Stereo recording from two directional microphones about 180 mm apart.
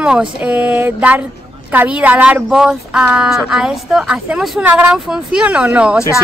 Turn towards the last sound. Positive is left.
turn(degrees=-5)  # may be behind; listen again after turning